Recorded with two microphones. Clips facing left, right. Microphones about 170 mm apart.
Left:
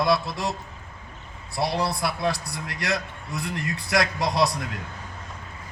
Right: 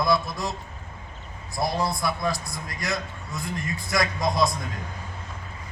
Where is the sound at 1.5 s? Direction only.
75° left (ahead or behind).